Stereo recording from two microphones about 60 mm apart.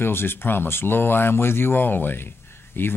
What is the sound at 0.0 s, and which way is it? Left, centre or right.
Speech, left.